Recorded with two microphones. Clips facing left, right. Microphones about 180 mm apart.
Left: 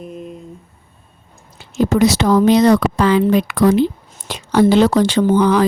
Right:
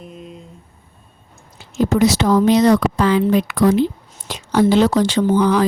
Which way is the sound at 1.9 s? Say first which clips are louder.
Left 1 dB; 65° left (ahead or behind).